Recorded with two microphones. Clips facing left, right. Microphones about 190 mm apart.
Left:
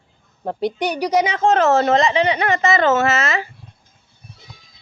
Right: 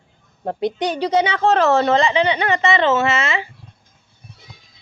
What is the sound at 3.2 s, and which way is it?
Speech, 40° left (ahead or behind).